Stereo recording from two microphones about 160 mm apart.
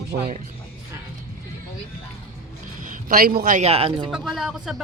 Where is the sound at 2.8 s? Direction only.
65° right (ahead or behind).